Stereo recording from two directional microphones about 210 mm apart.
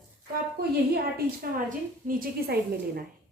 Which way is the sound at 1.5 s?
40° right (ahead or behind).